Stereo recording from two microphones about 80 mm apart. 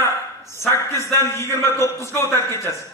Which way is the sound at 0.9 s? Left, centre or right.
Left.